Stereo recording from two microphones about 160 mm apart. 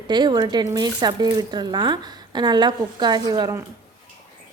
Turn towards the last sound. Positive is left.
turn(degrees=-25)  # may be behind; listen again after turning